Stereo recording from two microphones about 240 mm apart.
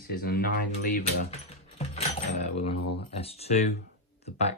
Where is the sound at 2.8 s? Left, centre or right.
Left.